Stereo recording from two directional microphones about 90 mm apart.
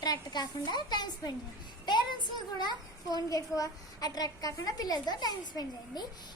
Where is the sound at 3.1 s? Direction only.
45° left (ahead or behind).